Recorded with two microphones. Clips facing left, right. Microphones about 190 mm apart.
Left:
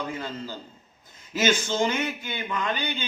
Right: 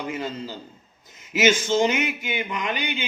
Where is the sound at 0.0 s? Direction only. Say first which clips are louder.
Right 3 dB; 15° right (ahead or behind).